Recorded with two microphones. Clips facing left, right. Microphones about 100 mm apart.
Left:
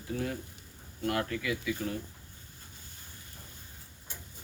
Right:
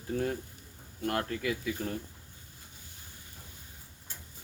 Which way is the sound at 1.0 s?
40° right (ahead or behind).